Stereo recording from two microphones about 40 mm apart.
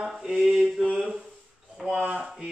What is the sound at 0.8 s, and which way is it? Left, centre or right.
Speech, right.